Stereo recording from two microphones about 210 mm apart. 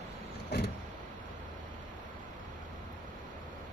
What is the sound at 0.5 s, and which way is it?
Vehicle, 50° left (ahead or behind).